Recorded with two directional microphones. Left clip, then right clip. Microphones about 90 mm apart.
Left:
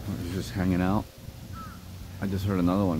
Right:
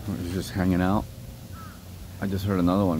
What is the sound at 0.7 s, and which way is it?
Speech, 50° right (ahead or behind).